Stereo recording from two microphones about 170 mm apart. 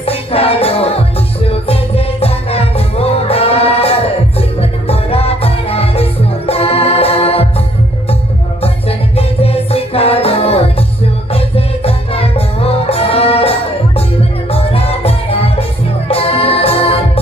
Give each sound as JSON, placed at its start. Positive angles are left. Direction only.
{"t": 0.0, "sound": "music", "side_deg": 35}
{"t": 8.6, "sound": "music", "side_deg": 35}